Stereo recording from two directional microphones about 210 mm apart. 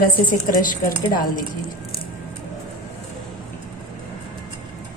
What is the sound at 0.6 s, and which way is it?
Speech, 40° left (ahead or behind).